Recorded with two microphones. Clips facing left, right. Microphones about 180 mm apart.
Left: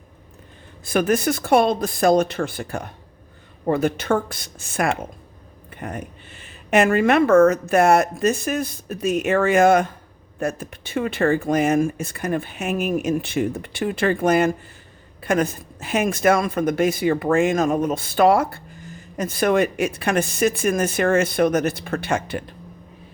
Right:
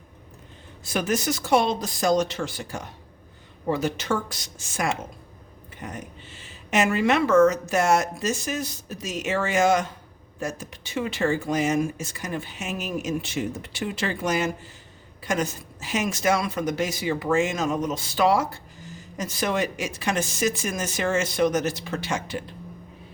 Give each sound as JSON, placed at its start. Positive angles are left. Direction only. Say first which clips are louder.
{"t": 0.9, "sound": "speech", "louder": "left 6 dB", "side_deg": 55}